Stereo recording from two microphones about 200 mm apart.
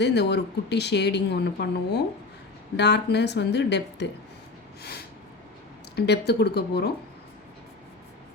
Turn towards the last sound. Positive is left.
turn(degrees=55)  # may be behind; listen again after turning